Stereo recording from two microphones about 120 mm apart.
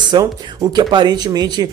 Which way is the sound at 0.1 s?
35° right (ahead or behind).